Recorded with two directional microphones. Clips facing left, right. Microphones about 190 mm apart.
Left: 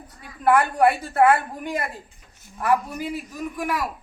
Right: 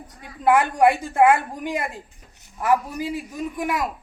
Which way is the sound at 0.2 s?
20° right (ahead or behind).